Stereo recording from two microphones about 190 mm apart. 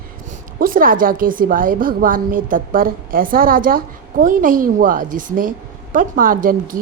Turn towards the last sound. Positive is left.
turn(degrees=-50)  # may be behind; listen again after turning